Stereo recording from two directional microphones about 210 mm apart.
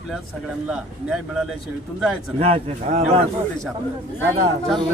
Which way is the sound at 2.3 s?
30° right (ahead or behind).